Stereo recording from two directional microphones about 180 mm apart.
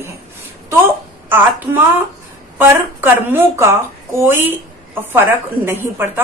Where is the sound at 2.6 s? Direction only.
10° right (ahead or behind).